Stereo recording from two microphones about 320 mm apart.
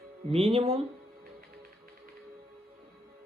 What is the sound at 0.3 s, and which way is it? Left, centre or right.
Speech, centre.